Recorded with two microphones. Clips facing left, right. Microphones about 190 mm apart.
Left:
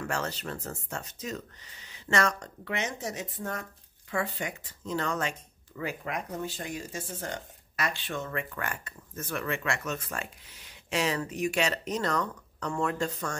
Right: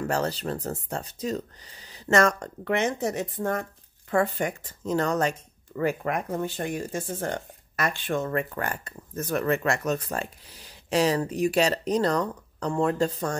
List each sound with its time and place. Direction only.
0.0 s speech: 35° right (ahead or behind)
5.8 s speech: 50° right (ahead or behind); by 13.4 s 35° right (ahead or behind)